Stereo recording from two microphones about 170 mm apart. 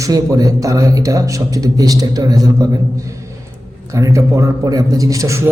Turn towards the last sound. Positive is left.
turn(degrees=-15)  # may be behind; listen again after turning